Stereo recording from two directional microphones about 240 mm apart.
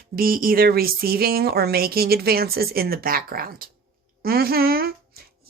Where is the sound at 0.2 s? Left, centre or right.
Right.